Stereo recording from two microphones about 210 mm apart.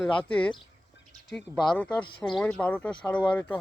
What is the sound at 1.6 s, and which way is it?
Speech, 5° left (ahead or behind).